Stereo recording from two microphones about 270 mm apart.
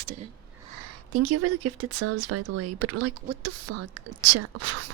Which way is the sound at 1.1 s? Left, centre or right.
Right.